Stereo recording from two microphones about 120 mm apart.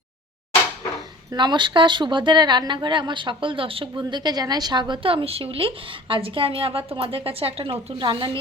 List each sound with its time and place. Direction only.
1.3 s speech: 40° right (ahead or behind)